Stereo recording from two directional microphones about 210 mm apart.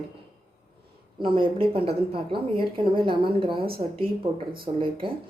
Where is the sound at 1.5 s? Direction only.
25° right (ahead or behind).